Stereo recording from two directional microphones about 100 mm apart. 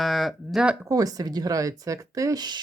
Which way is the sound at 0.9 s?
35° right (ahead or behind).